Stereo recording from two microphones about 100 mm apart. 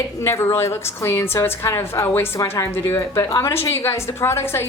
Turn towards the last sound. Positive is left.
turn(degrees=25)  # may be behind; listen again after turning